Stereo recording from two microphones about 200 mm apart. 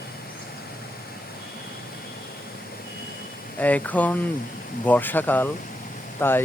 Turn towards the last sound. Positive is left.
turn(degrees=10)  # may be behind; listen again after turning